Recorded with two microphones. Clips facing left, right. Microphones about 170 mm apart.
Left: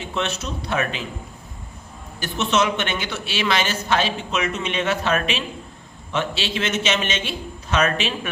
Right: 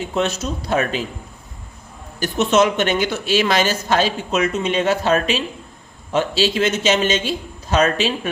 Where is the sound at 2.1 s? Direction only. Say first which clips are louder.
Right 5 dB; 45° right (ahead or behind).